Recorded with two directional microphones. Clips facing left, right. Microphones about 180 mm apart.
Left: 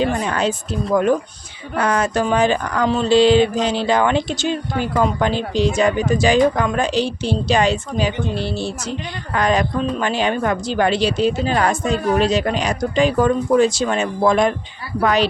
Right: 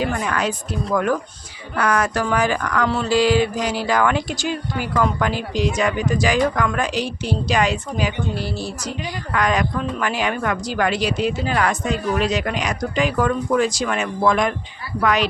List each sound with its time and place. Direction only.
0.0 s speech: 25° left (ahead or behind)